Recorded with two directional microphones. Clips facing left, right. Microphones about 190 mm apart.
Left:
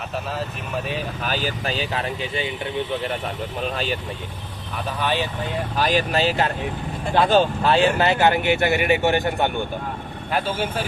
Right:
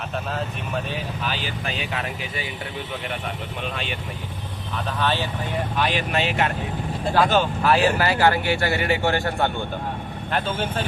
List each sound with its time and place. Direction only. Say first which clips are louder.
1.2 s speech: left 3 dB; 45° left (ahead or behind)
3.6 s speech: left 5 dB; 40° left (ahead or behind)
4.9 s speech: left 1 dB; 15° left (ahead or behind)
5.7 s speech: left 4 dB; 40° left (ahead or behind); by 10.8 s 10° left (ahead or behind)